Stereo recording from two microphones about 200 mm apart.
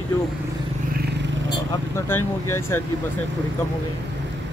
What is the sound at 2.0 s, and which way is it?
Speech, 10° left (ahead or behind).